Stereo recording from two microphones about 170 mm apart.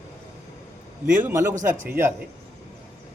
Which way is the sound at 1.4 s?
45° right (ahead or behind).